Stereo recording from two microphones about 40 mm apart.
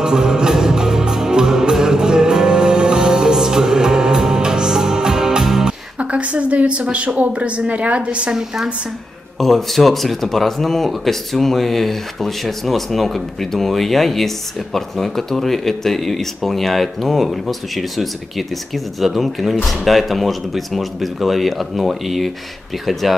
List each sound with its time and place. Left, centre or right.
0.0 s music: centre
5.9 s a woman's voice: right
9.4 s speech: centre